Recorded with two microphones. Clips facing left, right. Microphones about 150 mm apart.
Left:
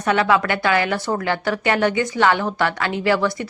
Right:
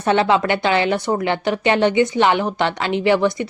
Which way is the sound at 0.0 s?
25° right (ahead or behind).